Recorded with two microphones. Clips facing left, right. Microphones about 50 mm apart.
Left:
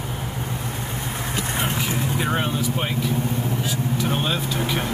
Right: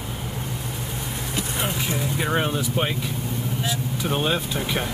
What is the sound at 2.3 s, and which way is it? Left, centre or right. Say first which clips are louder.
Speech: right 3 dB; centre.